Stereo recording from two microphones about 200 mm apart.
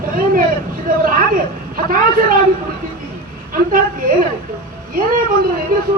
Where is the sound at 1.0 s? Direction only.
45° right (ahead or behind).